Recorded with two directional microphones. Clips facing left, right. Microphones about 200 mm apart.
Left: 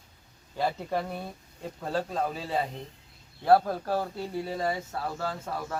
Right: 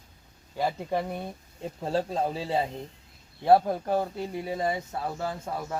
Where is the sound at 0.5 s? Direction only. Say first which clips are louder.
Right 1 dB; 15° right (ahead or behind).